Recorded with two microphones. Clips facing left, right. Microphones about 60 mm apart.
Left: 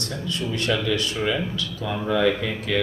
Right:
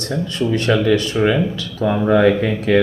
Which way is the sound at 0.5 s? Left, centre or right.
Right.